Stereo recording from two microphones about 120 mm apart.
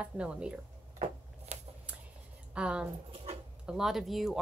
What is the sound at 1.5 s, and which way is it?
Shuffling cards, 65° right (ahead or behind).